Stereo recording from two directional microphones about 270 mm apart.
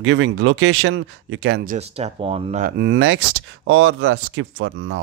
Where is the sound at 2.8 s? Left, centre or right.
Right.